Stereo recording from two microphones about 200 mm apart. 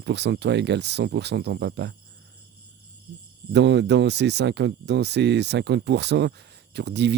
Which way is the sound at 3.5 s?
60° right (ahead or behind).